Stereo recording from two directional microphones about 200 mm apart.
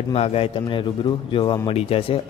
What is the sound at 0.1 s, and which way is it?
A man's voice, 30° left (ahead or behind).